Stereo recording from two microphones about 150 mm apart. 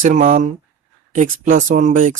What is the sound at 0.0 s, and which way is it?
A woman's voice, 60° right (ahead or behind).